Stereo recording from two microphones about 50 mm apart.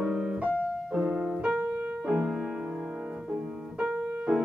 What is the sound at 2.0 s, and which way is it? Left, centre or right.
Music, centre.